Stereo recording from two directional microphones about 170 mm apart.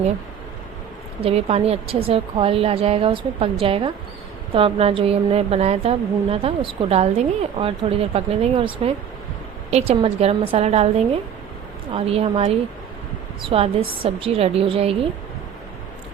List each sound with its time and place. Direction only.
1.2 s a woman's voice: 35° right (ahead or behind)